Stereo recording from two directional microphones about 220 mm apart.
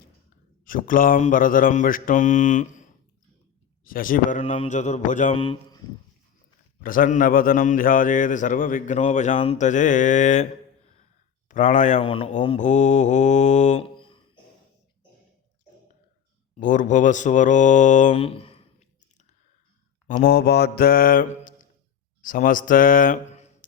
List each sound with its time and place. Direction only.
0.6 s a man's voice: 40° left (ahead or behind)
3.8 s a man's voice: 40° left (ahead or behind)
6.8 s a man's voice: 40° left (ahead or behind); by 14.2 s 20° left (ahead or behind)
16.6 s mantra: 35° left (ahead or behind)
20.1 s a man's voice: 40° left (ahead or behind)